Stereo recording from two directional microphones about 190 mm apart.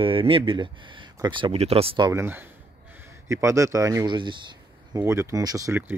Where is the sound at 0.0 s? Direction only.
30° right (ahead or behind).